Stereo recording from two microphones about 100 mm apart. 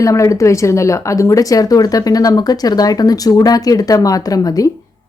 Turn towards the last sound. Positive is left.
turn(degrees=35)  # may be behind; listen again after turning